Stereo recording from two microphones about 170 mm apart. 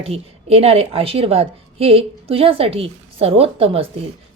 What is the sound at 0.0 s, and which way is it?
A woman's voice, 35° right (ahead or behind).